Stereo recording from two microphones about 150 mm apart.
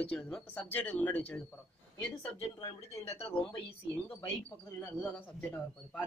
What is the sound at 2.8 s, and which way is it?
Speech, 45° left (ahead or behind).